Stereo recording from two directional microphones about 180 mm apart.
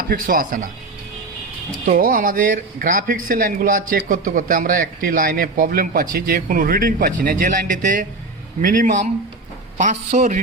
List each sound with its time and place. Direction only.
0.0 s speech: 55° right (ahead or behind)
1.9 s speech: 50° right (ahead or behind)